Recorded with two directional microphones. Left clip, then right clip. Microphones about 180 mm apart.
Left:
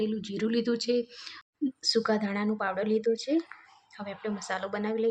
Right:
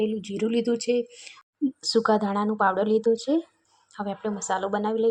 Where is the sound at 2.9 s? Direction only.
10° right (ahead or behind).